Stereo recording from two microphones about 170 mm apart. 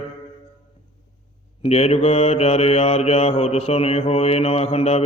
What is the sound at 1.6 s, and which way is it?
Mantra, 35° left (ahead or behind).